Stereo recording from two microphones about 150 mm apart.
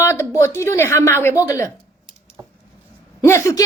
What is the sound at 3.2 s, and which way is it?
Speech, 20° left (ahead or behind).